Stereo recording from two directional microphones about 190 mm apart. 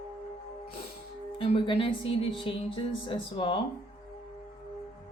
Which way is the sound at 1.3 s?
30° left (ahead or behind).